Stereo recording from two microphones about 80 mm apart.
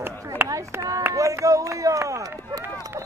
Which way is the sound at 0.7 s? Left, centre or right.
Right.